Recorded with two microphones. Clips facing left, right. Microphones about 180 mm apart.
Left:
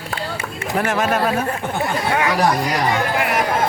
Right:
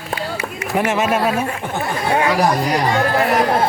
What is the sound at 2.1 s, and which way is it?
Speech, 30° right (ahead or behind).